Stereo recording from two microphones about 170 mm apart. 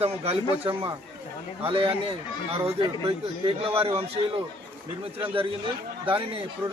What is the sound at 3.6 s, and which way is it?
Speech, 35° right (ahead or behind).